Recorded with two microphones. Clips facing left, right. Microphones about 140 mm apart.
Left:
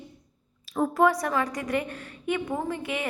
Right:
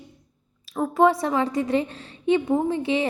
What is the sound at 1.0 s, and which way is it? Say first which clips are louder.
A woman's voice: right 5 dB; 25° right (ahead or behind).